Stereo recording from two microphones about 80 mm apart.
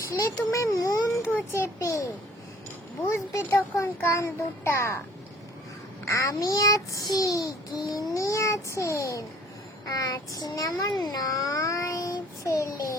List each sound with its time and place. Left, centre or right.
0.5 s a child's voice: left
6.1 s a child's voice: left